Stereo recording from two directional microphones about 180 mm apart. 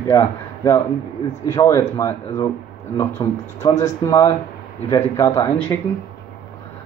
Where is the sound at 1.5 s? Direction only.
15° left (ahead or behind).